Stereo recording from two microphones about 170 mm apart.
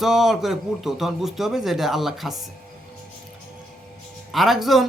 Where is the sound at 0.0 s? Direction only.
Centre (ahead or behind).